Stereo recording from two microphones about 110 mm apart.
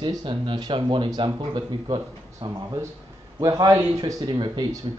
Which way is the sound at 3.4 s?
30° right (ahead or behind).